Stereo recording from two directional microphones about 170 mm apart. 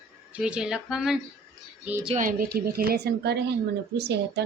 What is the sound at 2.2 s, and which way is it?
A woman's voice, 55° right (ahead or behind).